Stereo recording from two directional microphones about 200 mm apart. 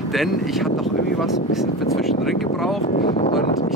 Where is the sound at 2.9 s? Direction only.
45° left (ahead or behind).